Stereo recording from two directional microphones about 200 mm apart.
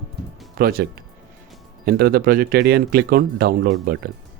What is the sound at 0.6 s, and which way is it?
Speech, 50° right (ahead or behind).